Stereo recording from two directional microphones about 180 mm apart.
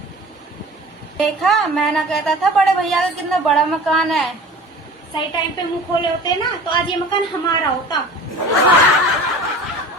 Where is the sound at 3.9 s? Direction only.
Centre (ahead or behind).